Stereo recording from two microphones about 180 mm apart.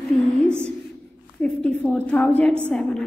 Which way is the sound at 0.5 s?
5° left (ahead or behind).